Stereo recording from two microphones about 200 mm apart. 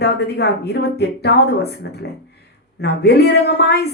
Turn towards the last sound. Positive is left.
turn(degrees=55)  # may be behind; listen again after turning